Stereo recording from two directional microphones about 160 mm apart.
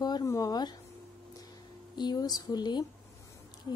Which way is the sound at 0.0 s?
20° left (ahead or behind).